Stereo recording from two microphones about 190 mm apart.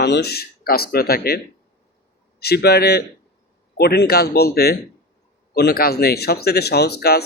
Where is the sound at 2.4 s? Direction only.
55° left (ahead or behind).